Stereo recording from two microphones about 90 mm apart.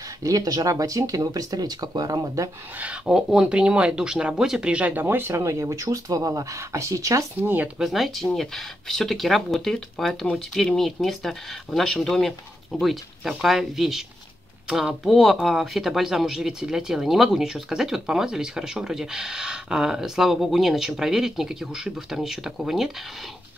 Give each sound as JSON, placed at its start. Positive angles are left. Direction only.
{"t": 0.2, "sound": "speech", "side_deg": -40}
{"t": 2.8, "sound": "speech", "side_deg": -10}
{"t": 7.4, "sound": "speech", "side_deg": -20}
{"t": 7.8, "sound": "speech", "side_deg": 0}